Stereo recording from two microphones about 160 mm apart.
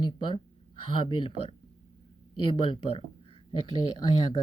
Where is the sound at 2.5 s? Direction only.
35° left (ahead or behind).